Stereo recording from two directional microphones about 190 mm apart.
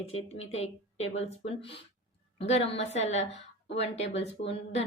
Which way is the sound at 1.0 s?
90° left.